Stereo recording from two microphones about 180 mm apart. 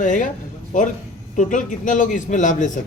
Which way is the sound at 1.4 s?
45° left (ahead or behind).